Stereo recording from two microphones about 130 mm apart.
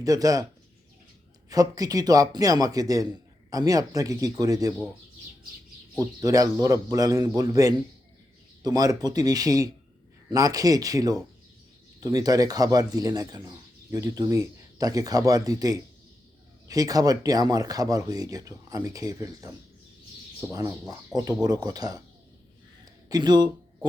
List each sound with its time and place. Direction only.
0.0 s speech: 25° right (ahead or behind)
1.5 s speech: 30° right (ahead or behind)
6.0 s speech: 25° right (ahead or behind)
21.1 s speech: 5° right (ahead or behind)
21.4 s speech: 30° right (ahead or behind)
23.0 s speech: 30° right (ahead or behind)